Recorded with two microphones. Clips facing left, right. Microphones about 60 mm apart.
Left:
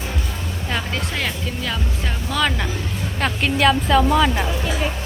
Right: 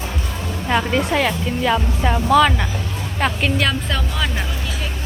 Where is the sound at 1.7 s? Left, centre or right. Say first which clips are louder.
Right 7 dB; right.